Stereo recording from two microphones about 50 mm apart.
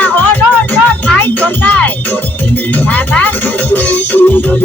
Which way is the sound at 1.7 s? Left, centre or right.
Left.